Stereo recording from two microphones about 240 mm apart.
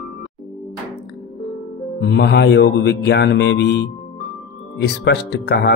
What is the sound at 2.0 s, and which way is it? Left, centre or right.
Speech, left.